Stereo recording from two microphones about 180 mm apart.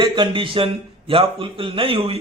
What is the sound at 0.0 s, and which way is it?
A man's voice, 30° right (ahead or behind).